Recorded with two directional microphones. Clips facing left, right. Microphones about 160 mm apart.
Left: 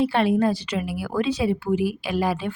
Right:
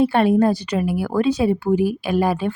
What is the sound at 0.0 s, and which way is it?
Speech, 50° right (ahead or behind).